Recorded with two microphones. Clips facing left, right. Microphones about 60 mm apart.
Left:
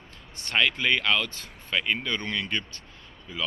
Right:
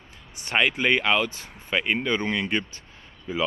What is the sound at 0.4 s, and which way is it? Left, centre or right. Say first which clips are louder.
Speech: right 2 dB; centre.